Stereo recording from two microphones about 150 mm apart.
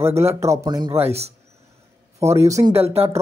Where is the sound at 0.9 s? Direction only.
45° right (ahead or behind).